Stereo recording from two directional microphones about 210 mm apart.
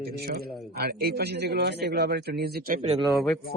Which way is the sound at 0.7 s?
45° right (ahead or behind).